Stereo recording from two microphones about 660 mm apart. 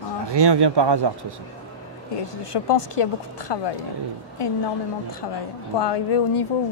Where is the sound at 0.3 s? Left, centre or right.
Right.